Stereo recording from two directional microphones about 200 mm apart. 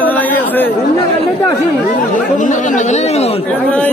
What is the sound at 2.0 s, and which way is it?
Speech, 40° left (ahead or behind).